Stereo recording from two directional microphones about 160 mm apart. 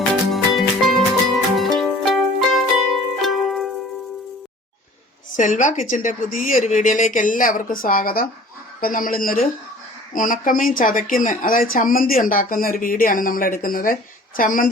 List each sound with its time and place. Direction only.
0.1 s music: centre (ahead or behind)
5.3 s speech: 55° left (ahead or behind)